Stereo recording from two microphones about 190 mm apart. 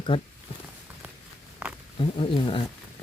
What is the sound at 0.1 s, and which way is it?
Speech, 25° left (ahead or behind).